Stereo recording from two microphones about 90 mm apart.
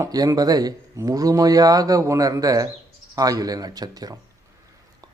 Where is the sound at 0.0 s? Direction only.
40° right (ahead or behind).